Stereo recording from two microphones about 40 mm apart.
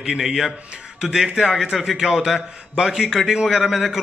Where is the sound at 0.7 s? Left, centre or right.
Right.